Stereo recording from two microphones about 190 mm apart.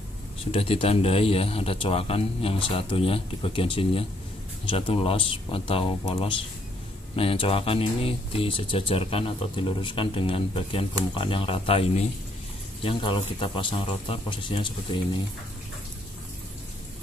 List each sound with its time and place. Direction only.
0.5 s speech: 30° left (ahead or behind)